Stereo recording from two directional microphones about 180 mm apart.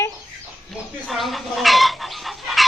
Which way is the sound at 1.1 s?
Centre (ahead or behind).